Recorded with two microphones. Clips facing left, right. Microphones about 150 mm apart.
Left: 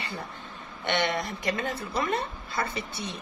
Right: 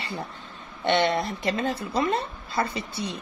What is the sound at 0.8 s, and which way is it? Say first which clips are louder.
Speech: right 5 dB; 25° right (ahead or behind).